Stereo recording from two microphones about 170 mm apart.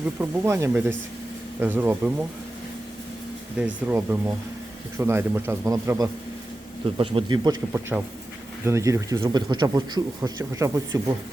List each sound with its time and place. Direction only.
0.2 s a man's voice: 15° right (ahead or behind)
3.6 s a man's voice: 10° right (ahead or behind)
7.0 s a man's voice: 30° right (ahead or behind)
7.7 s a man's voice: 15° right (ahead or behind)